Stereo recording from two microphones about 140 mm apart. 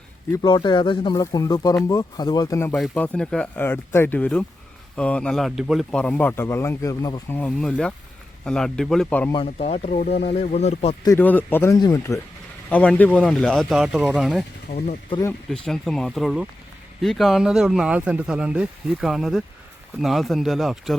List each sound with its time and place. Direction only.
0.4 s speech: 30° left (ahead or behind)
2.9 s speech: 10° left (ahead or behind)
6.0 s speech: 10° left (ahead or behind)
7.3 s speech: 10° left (ahead or behind)
9.3 s speech: 45° left (ahead or behind)
11.2 s speech: 15° left (ahead or behind)
12.7 s speech: 10° left (ahead or behind)
14.7 s speech: 55° left (ahead or behind)
15.4 s speech: 5° left (ahead or behind)